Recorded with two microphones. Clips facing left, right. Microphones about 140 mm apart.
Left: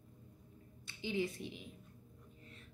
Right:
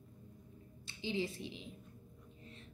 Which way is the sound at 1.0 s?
25° right (ahead or behind).